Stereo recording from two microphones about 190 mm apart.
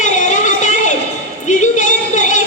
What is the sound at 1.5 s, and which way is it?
Music, 40° left (ahead or behind).